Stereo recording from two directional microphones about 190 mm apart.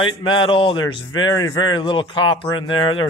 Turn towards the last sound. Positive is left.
turn(degrees=25)  # may be behind; listen again after turning